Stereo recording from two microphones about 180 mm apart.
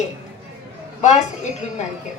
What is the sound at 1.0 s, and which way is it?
Speech, 40° left (ahead or behind).